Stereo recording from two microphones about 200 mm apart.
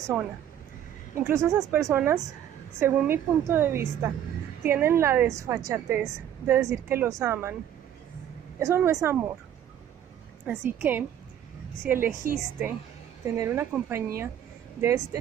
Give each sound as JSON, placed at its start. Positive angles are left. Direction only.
{"t": 0.1, "sound": "a woman's voice", "side_deg": -5}
{"t": 8.5, "sound": "a woman's voice", "side_deg": -10}
{"t": 10.4, "sound": "a woman's voice", "side_deg": -10}
{"t": 12.2, "sound": "a woman's voice", "side_deg": -45}
{"t": 13.2, "sound": "a woman's voice", "side_deg": -15}